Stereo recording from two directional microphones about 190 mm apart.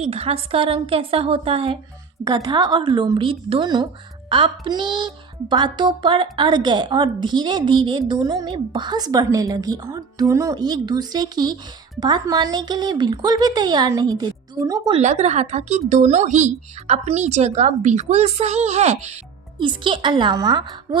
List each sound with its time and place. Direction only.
0.0 s a woman's voice: 30° right (ahead or behind)
14.9 s a woman's voice: 35° right (ahead or behind)